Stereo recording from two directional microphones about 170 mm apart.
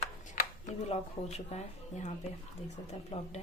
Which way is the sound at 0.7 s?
40° left (ahead or behind).